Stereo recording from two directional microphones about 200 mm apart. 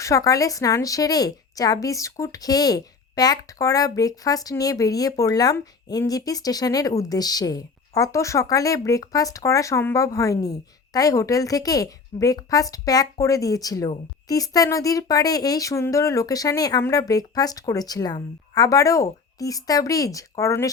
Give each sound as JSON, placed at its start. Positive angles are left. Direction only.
{"t": 0.0, "sound": "a woman's voice", "side_deg": 15}